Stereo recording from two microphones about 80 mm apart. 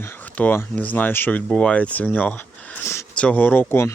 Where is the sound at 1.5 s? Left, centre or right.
Centre; by 3.0 s left.